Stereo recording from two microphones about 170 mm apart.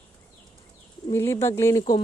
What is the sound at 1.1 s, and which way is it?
Speech, 15° left (ahead or behind).